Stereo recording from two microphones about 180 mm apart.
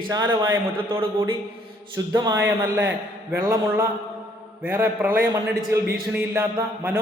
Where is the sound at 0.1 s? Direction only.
20° right (ahead or behind).